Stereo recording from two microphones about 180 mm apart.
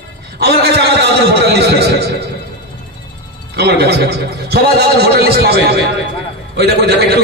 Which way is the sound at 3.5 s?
65° right (ahead or behind).